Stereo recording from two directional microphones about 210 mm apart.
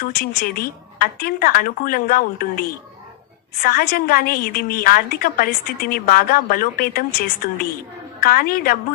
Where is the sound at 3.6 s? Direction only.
45° left (ahead or behind).